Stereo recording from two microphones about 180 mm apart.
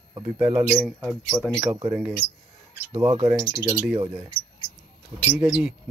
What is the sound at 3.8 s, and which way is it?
Speech, 10° right (ahead or behind).